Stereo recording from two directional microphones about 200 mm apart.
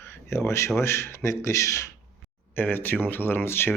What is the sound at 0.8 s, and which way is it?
Speech, 15° left (ahead or behind).